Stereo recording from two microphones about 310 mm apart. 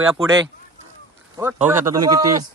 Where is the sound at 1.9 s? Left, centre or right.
Right.